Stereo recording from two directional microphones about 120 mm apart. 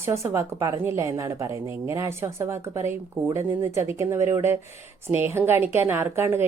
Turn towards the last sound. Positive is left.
turn(degrees=-20)  # may be behind; listen again after turning